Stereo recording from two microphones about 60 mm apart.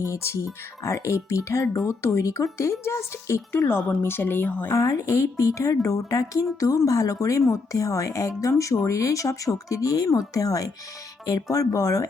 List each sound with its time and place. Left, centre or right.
0.0 s speech: left
4.7 s speech: left